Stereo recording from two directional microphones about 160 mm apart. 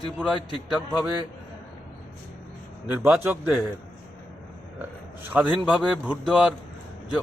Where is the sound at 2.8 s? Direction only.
10° right (ahead or behind).